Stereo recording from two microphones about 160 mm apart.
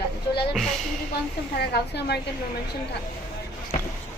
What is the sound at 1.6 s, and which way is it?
Speech, 90° left.